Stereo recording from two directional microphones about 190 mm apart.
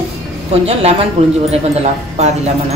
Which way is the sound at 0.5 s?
30° right (ahead or behind).